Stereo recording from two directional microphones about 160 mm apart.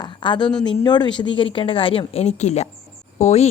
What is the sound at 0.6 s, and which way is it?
Speech, 25° left (ahead or behind).